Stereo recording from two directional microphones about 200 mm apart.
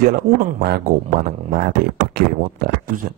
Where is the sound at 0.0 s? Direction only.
50° right (ahead or behind).